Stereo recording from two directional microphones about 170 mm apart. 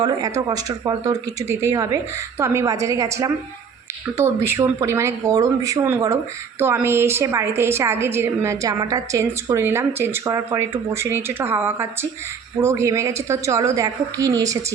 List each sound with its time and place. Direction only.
0.0 s a woman's voice: 25° right (ahead or behind)